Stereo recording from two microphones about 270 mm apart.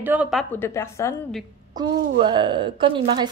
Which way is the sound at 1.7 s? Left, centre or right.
Centre.